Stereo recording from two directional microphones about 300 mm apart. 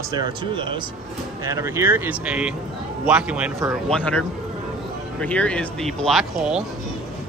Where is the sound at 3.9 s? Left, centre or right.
Centre.